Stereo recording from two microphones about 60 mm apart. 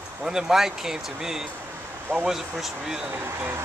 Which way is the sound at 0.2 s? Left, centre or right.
Centre.